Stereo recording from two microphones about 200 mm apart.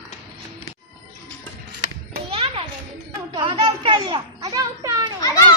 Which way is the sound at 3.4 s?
25° right (ahead or behind).